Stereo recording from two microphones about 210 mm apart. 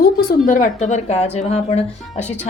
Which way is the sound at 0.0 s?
45° left (ahead or behind).